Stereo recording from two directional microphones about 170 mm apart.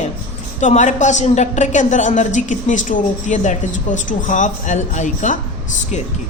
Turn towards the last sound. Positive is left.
turn(degrees=45)  # may be behind; listen again after turning